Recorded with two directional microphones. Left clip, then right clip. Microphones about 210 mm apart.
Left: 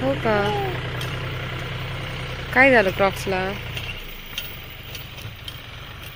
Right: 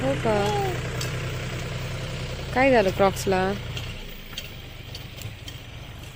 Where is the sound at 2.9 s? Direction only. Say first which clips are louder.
Even; 20° right (ahead or behind).